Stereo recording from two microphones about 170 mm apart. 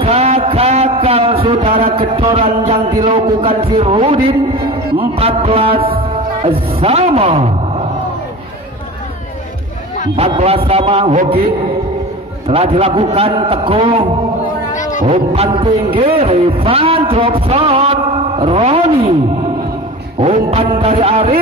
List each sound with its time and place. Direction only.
0.0 s a man's voice: 35° right (ahead or behind)
10.1 s a man's voice: 35° right (ahead or behind)
12.4 s a man's voice: 35° right (ahead or behind)
14.7 s a sound: 45° left (ahead or behind)
15.0 s a man's voice: 35° right (ahead or behind)
20.2 s music: 30° right (ahead or behind)
20.8 s a man's voice: 35° right (ahead or behind)